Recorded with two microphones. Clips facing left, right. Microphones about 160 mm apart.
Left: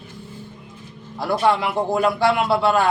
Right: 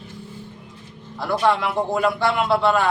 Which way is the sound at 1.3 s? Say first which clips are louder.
Left 1 dB; 5° left (ahead or behind).